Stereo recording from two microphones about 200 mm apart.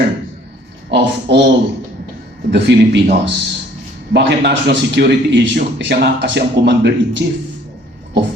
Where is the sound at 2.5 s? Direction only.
60° right (ahead or behind).